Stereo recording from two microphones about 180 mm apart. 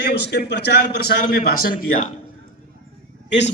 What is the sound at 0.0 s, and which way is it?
A man's voice, 70° left (ahead or behind).